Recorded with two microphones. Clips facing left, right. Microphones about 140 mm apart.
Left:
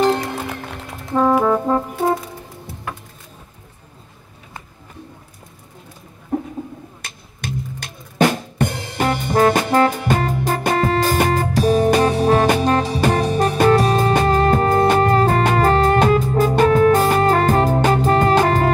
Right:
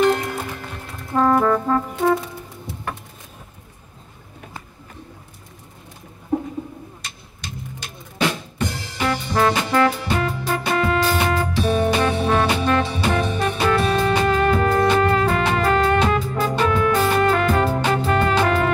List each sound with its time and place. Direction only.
1.1 s music: 10° left (ahead or behind)
8.2 s drum kit: 50° left (ahead or behind)